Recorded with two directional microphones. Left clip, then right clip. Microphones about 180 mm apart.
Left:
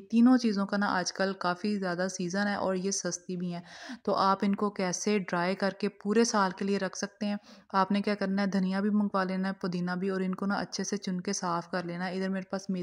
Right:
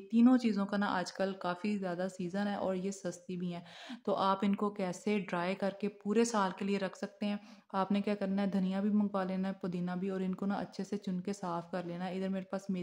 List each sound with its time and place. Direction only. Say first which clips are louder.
0.1 s speech: left 4 dB; 30° left (ahead or behind)